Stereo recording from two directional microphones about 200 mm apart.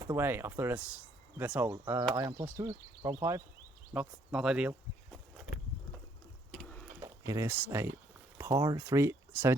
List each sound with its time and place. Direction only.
0.0 s speech: 10° right (ahead or behind)
6.5 s a sound: 5° left (ahead or behind)
7.0 s speech: 15° right (ahead or behind)